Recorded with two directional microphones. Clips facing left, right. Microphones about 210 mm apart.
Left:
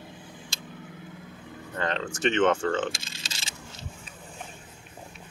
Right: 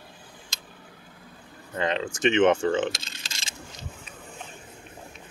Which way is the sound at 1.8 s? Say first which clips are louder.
Right 3 dB; 15° right (ahead or behind).